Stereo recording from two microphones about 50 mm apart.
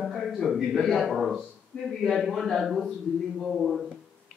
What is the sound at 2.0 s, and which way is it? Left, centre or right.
A man's voice, centre.